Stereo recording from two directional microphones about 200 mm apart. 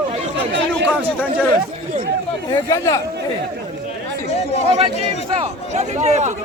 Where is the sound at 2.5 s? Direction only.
15° left (ahead or behind).